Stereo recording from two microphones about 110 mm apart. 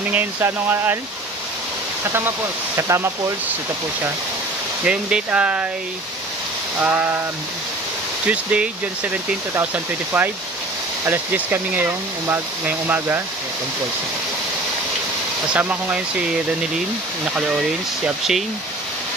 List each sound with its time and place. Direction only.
0.1 s speech: 20° right (ahead or behind)
2.1 s speech: 25° right (ahead or behind)
4.8 s speech: 10° right (ahead or behind)
6.8 s speech: 20° right (ahead or behind)
8.3 s speech: 10° right (ahead or behind)
11.1 s speech: 15° right (ahead or behind)
15.5 s speech: 15° right (ahead or behind)
17.4 s speech: 5° right (ahead or behind)